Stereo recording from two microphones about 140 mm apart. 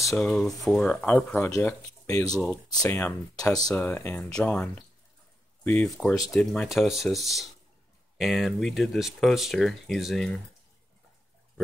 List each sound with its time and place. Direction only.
0.1 s speech: 5° left (ahead or behind); by 3.7 s 25° left (ahead or behind)
3.7 s speech: 15° left (ahead or behind)
5.9 s speech: 5° left (ahead or behind)